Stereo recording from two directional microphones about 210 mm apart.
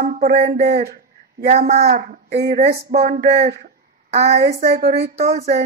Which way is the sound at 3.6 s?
30° right (ahead or behind).